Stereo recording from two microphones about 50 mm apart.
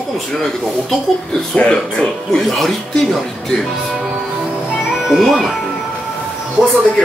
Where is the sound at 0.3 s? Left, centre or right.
Centre.